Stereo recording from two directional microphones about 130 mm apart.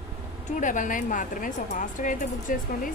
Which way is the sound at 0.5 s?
80° left.